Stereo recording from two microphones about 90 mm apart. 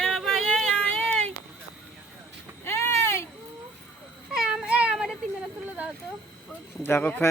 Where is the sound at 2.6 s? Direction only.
30° left (ahead or behind).